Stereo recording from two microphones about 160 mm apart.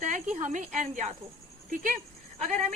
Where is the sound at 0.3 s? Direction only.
55° right (ahead or behind).